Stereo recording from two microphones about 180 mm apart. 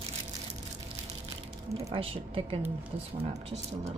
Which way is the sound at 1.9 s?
30° right (ahead or behind).